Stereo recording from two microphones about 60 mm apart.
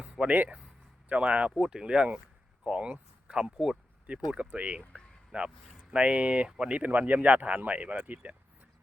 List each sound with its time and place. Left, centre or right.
0.0 s speech: right
3.3 s a sound: centre
4.3 s speech: right